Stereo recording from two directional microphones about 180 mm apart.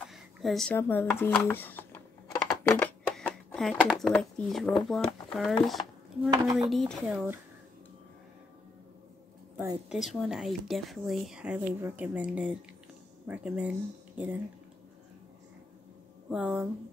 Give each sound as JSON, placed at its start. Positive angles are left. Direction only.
{"t": 0.1, "sound": "a sound", "side_deg": 0}
{"t": 0.7, "sound": "speech", "side_deg": 10}
{"t": 6.3, "sound": "speech", "side_deg": -20}
{"t": 6.6, "sound": "speech", "side_deg": 0}
{"t": 9.8, "sound": "speech", "side_deg": 0}
{"t": 16.3, "sound": "speech", "side_deg": -5}